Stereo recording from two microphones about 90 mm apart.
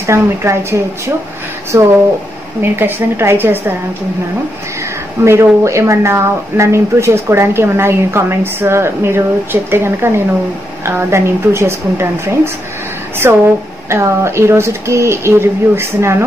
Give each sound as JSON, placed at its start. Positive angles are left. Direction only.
{"t": 0.0, "sound": "a woman's voice", "side_deg": -30}
{"t": 5.2, "sound": "speech", "side_deg": -30}